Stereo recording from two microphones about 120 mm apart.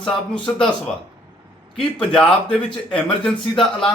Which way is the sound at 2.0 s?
10° left (ahead or behind).